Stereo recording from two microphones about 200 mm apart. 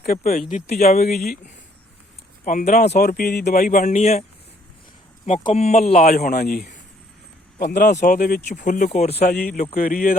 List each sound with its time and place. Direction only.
0.0 s speech: 45° left (ahead or behind)
0.5 s speech: 35° left (ahead or behind)
2.4 s speech: 40° left (ahead or behind)
2.9 s speech: 50° left (ahead or behind); by 4.2 s 30° left (ahead or behind)
5.4 s speech: 30° left (ahead or behind)
6.1 s speech: 45° left (ahead or behind); by 9.1 s 30° left (ahead or behind)
9.3 s a man's voice: 5° left (ahead or behind)
9.7 s speech: 40° left (ahead or behind)